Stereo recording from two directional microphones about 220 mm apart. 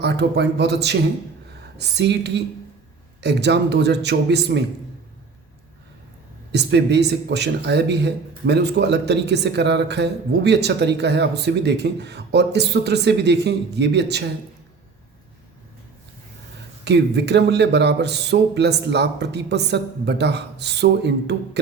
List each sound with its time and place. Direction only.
0.0 s speech: 50° right (ahead or behind)
6.5 s speech: 50° right (ahead or behind)
16.8 s speech: 50° right (ahead or behind)